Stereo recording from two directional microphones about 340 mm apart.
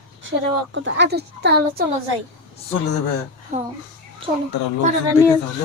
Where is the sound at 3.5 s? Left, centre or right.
Right.